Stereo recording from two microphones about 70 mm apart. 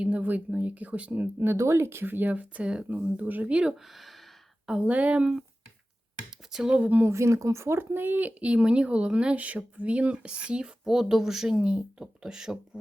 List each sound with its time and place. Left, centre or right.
0.0 s speech: right
1.4 s speech: right; by 3.8 s centre
4.8 s speech: centre
6.5 s speech: centre
6.7 s speech: centre
7.0 s speech: right; by 12.8 s centre